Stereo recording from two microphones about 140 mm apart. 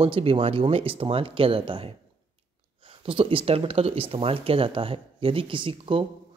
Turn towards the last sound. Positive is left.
turn(degrees=-40)  # may be behind; listen again after turning